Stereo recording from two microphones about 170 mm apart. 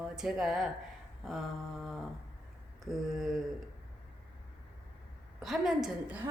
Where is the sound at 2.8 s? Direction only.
Centre (ahead or behind).